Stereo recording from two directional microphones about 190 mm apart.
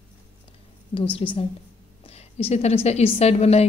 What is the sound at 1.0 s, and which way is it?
A woman's voice, 30° left (ahead or behind).